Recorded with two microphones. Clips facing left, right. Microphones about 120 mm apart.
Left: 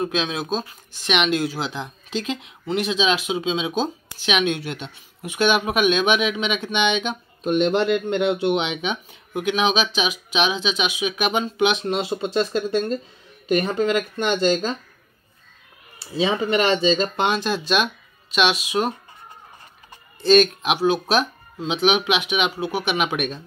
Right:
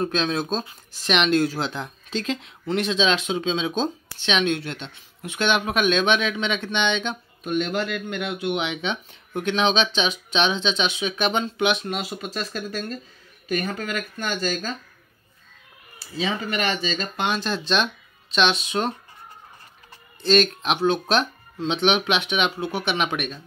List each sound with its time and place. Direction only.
0.0 s speech: 5° left (ahead or behind)
7.4 s speech: 25° left (ahead or behind)
8.6 s speech: 10° left (ahead or behind)
16.0 s speech: 25° left (ahead or behind)
17.3 s speech: 15° left (ahead or behind)
20.2 s speech: 15° left (ahead or behind)